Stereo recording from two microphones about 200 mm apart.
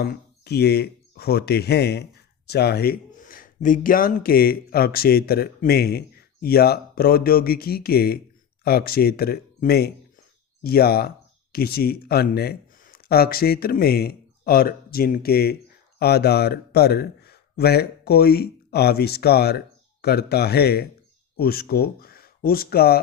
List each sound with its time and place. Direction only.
0.0 s a man's voice: 55° left (ahead or behind)